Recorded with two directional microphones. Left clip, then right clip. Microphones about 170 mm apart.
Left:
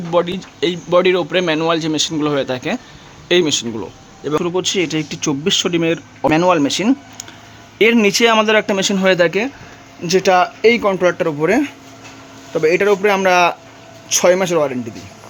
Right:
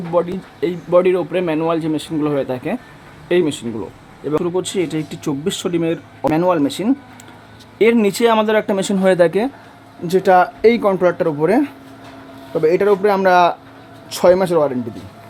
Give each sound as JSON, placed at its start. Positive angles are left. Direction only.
{"t": 0.1, "sound": "speech", "side_deg": 5}
{"t": 10.0, "sound": "speech", "side_deg": -5}
{"t": 10.4, "sound": "speech", "side_deg": -20}